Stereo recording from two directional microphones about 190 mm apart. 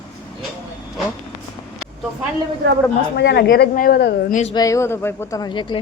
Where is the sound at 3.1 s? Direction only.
60° left (ahead or behind).